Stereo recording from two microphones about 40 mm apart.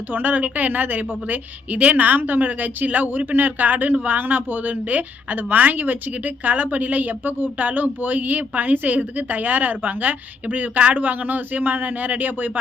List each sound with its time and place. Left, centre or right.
0.1 s a woman's voice: right